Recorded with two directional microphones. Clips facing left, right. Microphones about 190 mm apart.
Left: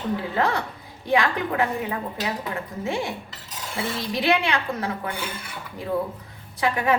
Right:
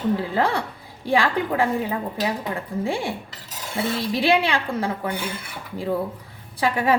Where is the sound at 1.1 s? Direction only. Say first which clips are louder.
Right 1 dB; 30° right (ahead or behind).